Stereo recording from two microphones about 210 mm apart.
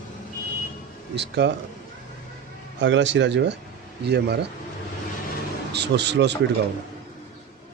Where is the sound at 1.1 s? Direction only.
55° right (ahead or behind).